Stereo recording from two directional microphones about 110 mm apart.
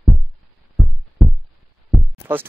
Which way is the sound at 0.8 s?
Centre (ahead or behind).